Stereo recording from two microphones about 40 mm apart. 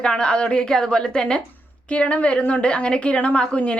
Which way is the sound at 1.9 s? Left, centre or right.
Left.